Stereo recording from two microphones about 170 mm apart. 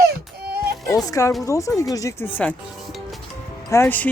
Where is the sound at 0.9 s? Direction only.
20° left (ahead or behind).